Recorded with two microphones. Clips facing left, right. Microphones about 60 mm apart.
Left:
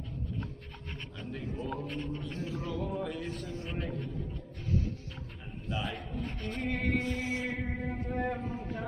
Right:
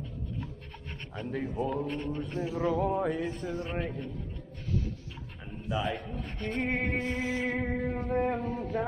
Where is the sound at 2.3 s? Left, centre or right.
Right.